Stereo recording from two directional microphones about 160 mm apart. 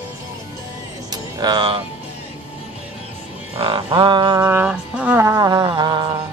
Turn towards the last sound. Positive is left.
turn(degrees=-25)  # may be behind; listen again after turning